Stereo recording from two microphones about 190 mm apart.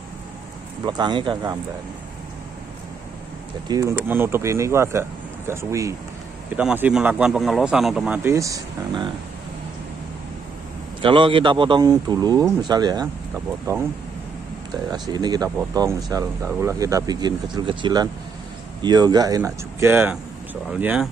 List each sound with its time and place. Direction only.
0.8 s speech: 25° right (ahead or behind)
3.6 s a man's voice: 20° right (ahead or behind)
11.0 s speech: 25° right (ahead or behind)
14.9 s speech: 20° right (ahead or behind)